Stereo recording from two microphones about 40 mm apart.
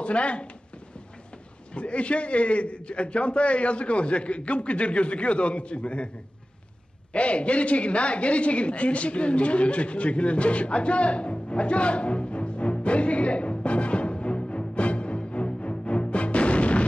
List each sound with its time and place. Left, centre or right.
0.0 s speech: left
1.7 s a man's voice: left
7.1 s a sound: left